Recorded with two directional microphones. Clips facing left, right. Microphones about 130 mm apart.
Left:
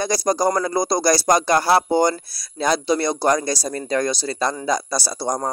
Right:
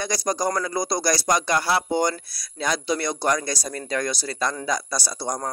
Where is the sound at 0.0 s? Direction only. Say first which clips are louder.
Left 5 dB; 35° left (ahead or behind).